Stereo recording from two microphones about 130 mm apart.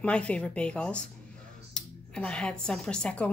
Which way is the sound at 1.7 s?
5° left (ahead or behind).